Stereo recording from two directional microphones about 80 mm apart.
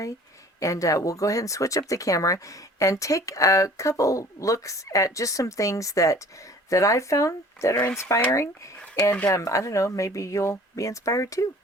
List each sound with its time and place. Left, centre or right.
0.6 s speech: left